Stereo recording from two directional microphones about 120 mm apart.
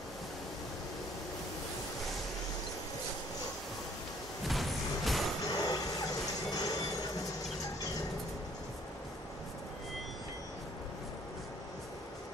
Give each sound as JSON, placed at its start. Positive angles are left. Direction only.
{"t": 4.5, "sound": "a sound", "side_deg": 0}
{"t": 5.5, "sound": "vehicle", "side_deg": 35}
{"t": 6.5, "sound": "train", "side_deg": 35}